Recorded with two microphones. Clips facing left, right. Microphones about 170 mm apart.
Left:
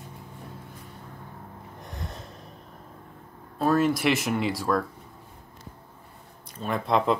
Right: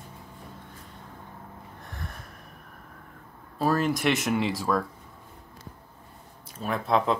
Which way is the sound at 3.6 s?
Centre (ahead or behind).